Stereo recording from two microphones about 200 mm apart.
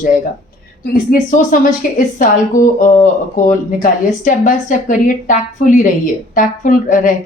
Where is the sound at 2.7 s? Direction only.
40° left (ahead or behind).